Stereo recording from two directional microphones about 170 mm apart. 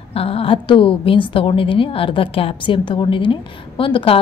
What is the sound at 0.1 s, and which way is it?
A woman's voice, 35° left (ahead or behind).